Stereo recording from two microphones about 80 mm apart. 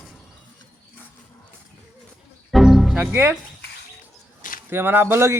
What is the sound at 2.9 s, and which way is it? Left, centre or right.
Speech, right.